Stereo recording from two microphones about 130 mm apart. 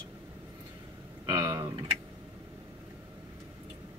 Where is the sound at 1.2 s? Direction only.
30° right (ahead or behind).